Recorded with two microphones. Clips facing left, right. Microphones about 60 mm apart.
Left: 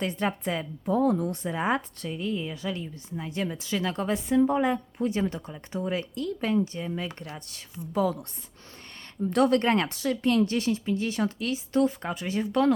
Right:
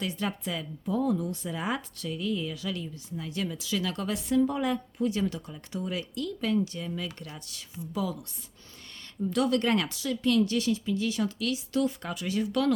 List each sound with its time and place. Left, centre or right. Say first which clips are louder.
0.0 s a woman's voice: left 4 dB; left
9.3 s a woman's voice: left 4 dB; left